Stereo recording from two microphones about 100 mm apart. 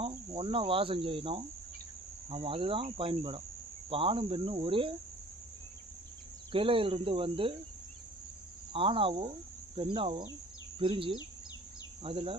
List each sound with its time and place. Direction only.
0.0 s cricket: 75° right (ahead or behind)
2.3 s speech: 65° right (ahead or behind)
6.5 s speech: 65° right (ahead or behind)
8.7 s speech: 65° right (ahead or behind)